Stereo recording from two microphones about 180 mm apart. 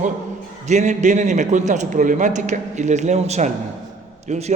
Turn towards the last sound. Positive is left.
turn(degrees=-40)  # may be behind; listen again after turning